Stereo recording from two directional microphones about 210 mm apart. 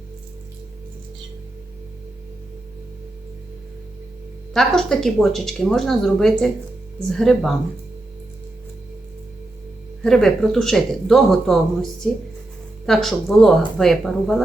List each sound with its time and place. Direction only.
4.5 s speech: centre (ahead or behind)
10.0 s speech: centre (ahead or behind)